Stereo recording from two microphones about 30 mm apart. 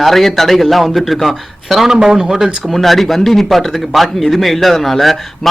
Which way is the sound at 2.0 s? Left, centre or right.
Right.